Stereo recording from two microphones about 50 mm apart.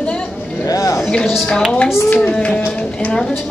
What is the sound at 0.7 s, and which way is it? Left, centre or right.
Music, left.